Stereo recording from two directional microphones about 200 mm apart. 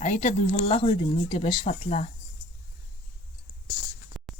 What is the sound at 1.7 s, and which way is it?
Speech, 35° left (ahead or behind).